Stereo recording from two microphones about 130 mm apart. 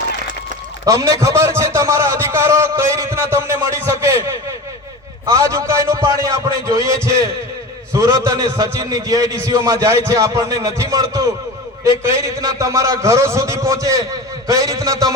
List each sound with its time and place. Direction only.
0.9 s a man's voice: 25° right (ahead or behind)
5.2 s a man's voice: 25° right (ahead or behind)